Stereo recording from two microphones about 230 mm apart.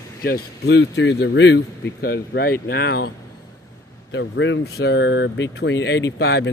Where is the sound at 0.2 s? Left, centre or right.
Left.